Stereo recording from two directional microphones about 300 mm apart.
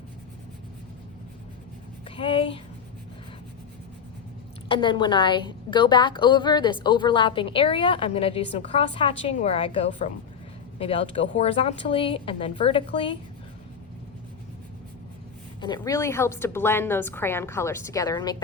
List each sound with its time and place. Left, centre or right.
2.0 s a sound: centre
4.7 s a woman's voice: centre
15.6 s a woman's voice: centre